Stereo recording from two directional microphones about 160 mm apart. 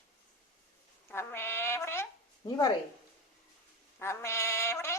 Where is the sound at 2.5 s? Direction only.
25° left (ahead or behind).